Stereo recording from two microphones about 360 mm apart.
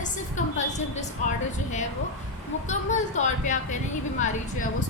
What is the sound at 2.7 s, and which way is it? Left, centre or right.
A woman's voice, centre.